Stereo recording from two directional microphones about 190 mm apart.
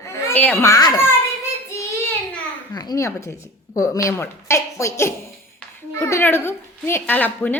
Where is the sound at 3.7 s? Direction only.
15° left (ahead or behind).